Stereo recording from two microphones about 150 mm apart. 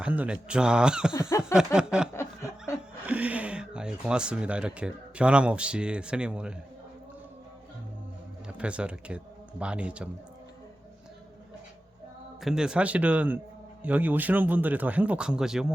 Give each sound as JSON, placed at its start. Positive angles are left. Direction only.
{"t": 0.0, "sound": "speech", "side_deg": -10}
{"t": 1.3, "sound": "a sound", "side_deg": 20}
{"t": 1.5, "sound": "speech", "side_deg": -5}
{"t": 2.1, "sound": "snicker", "side_deg": 20}
{"t": 3.1, "sound": "speech", "side_deg": -10}
{"t": 8.4, "sound": "a man's voice", "side_deg": -10}
{"t": 12.4, "sound": "speech", "side_deg": -5}